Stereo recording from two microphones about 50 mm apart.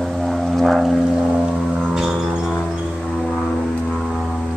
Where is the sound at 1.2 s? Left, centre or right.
Right.